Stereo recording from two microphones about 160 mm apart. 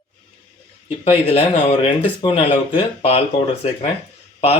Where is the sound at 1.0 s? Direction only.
35° left (ahead or behind).